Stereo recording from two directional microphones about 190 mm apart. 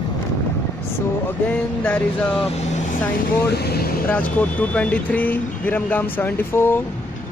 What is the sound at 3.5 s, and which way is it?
Speech, 55° left (ahead or behind).